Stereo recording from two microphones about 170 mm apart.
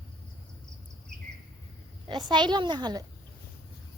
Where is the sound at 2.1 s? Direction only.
25° right (ahead or behind).